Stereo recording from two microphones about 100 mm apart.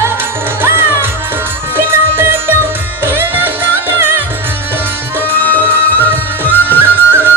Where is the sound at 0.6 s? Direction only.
20° right (ahead or behind).